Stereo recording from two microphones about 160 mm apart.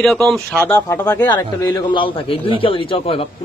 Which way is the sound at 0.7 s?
15° left (ahead or behind).